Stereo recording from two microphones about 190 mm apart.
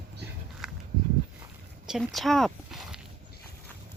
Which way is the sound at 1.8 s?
Centre (ahead or behind).